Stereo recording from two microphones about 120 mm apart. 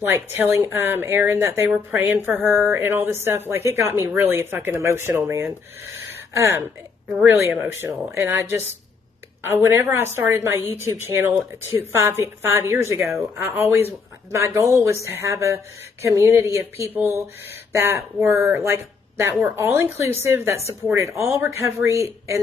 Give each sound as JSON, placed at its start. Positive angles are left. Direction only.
{"t": 0.0, "sound": "a woman's voice", "side_deg": -20}
{"t": 2.0, "sound": "a sound", "side_deg": -20}
{"t": 2.4, "sound": "a woman's voice", "side_deg": -20}